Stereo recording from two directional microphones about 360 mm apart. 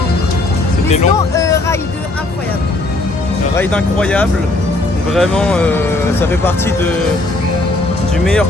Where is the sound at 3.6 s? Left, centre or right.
Centre.